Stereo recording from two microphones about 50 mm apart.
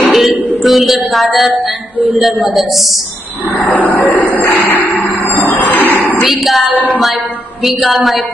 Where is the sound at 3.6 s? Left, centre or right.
Left.